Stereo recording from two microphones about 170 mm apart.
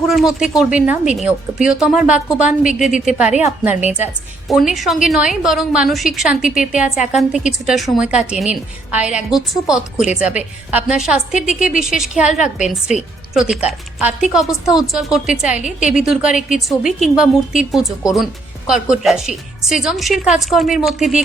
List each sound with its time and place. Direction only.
0.1 s speech: centre (ahead or behind)
3.2 s a woman's voice: 40° left (ahead or behind)
3.6 s a woman's voice: 10° right (ahead or behind)
12.3 s a woman's voice: 45° left (ahead or behind)
13.3 s speech: 5° right (ahead or behind)